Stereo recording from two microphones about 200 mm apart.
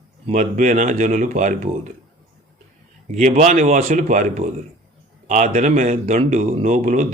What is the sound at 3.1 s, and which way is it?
A man's voice, 35° right (ahead or behind).